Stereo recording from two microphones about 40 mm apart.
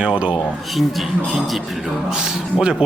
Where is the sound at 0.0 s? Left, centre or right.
Right.